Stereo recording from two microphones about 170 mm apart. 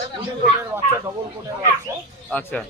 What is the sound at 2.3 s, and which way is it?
Speech, 5° left (ahead or behind).